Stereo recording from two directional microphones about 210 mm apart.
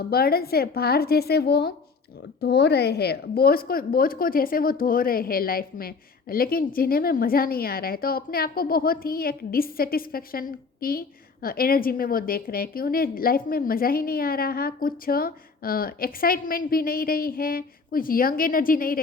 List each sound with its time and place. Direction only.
0.0 s a woman's voice: 45° left (ahead or behind)